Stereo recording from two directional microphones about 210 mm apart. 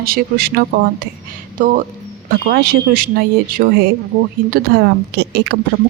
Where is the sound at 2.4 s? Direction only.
45° right (ahead or behind).